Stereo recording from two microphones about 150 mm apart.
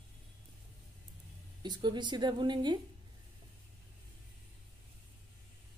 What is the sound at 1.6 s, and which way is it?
A woman's voice, 30° right (ahead or behind).